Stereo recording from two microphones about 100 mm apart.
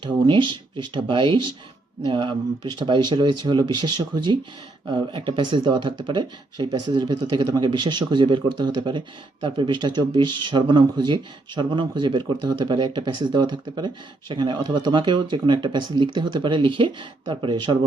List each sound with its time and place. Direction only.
0.0 s speech: 50° right (ahead or behind)